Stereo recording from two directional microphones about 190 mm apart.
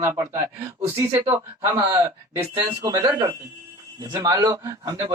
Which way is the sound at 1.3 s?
10° right (ahead or behind).